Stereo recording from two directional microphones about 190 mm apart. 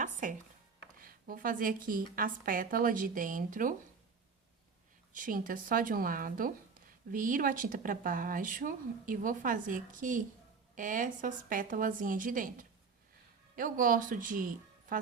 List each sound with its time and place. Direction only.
0.0 s a sound: 40° right (ahead or behind)
0.9 s speech: 50° right (ahead or behind)
5.1 s speech: 45° right (ahead or behind)